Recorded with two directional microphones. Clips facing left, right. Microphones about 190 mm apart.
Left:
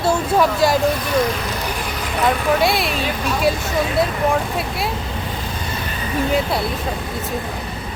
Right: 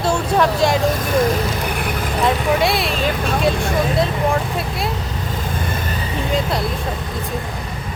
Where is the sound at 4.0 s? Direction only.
Centre (ahead or behind).